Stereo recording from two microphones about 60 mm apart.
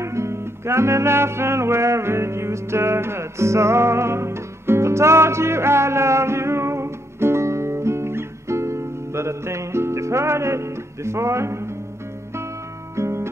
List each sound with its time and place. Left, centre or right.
0.0 s music: right
12.9 s guitar: right